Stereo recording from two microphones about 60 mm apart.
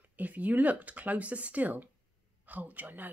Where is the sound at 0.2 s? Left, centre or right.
Right.